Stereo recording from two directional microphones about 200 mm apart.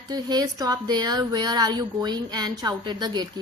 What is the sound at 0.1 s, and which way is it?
Speech, 20° right (ahead or behind).